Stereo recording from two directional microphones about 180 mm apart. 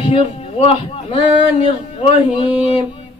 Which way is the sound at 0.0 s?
30° left (ahead or behind).